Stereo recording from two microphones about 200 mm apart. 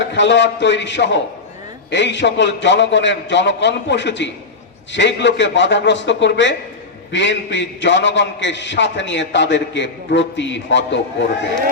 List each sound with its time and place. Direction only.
0.0 s a man's voice: 60° left (ahead or behind)